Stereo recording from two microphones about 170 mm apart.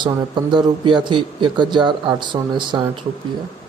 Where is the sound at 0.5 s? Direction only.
30° right (ahead or behind).